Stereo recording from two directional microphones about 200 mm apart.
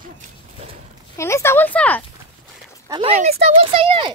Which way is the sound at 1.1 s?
15° left (ahead or behind).